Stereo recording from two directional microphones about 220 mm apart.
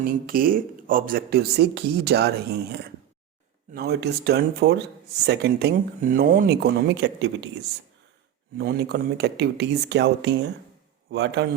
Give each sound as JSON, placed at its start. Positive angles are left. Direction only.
{"t": 0.0, "sound": "speech", "side_deg": -40}
{"t": 8.5, "sound": "speech", "side_deg": -45}